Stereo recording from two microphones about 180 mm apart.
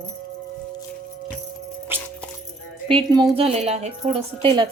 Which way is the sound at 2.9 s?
25° right (ahead or behind).